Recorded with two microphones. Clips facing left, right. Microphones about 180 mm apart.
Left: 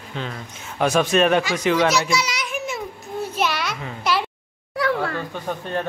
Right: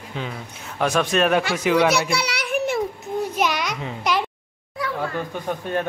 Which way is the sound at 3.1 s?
15° right (ahead or behind).